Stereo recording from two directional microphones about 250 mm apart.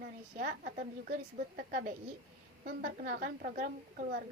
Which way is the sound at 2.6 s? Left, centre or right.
Right.